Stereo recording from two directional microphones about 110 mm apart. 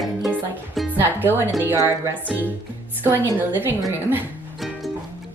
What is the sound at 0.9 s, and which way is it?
Speech, 20° right (ahead or behind).